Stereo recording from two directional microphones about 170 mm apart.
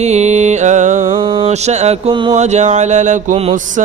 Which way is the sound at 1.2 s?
30° right (ahead or behind).